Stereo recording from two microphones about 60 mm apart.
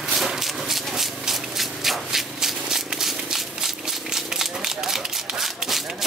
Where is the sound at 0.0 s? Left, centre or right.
Centre.